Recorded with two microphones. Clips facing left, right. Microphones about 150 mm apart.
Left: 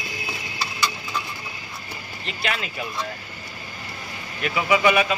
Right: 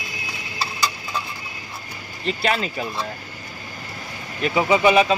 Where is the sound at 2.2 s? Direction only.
35° right (ahead or behind).